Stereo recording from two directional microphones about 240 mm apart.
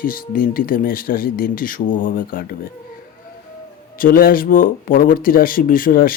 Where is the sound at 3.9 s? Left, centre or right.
Left.